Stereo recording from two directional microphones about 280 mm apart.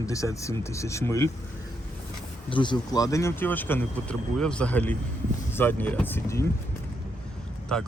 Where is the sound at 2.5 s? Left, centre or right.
Centre.